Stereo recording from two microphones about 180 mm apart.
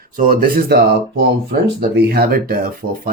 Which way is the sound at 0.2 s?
50° right (ahead or behind).